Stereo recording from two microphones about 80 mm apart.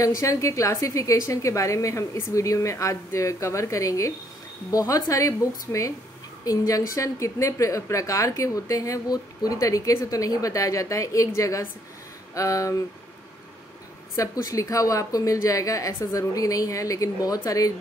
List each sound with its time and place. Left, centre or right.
0.0 s a woman's voice: left
14.1 s a woman's voice: left